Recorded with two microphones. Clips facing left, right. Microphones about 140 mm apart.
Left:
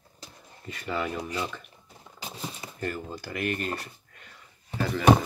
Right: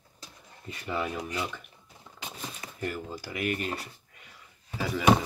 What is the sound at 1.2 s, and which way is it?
Speech, 30° left (ahead or behind).